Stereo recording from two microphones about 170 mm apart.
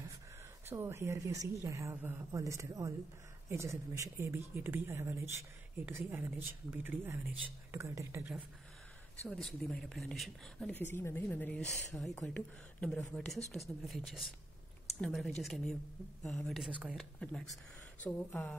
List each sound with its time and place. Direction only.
0.7 s speech: 15° right (ahead or behind)
9.3 s a woman's voice: centre (ahead or behind)